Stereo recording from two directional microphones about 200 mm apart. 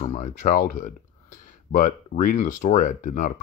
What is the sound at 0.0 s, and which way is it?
Speech, 35° left (ahead or behind).